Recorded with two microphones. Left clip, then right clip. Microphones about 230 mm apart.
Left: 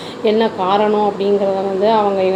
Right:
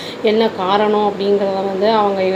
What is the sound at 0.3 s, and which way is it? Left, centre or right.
Speech, right.